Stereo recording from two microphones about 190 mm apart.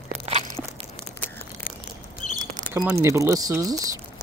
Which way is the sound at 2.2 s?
40° left (ahead or behind).